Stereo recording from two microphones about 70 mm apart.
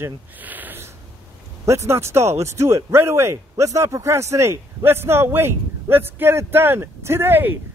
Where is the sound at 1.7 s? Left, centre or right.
Right.